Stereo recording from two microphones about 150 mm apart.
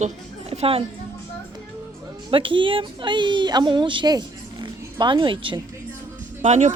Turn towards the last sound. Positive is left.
turn(degrees=-50)  # may be behind; listen again after turning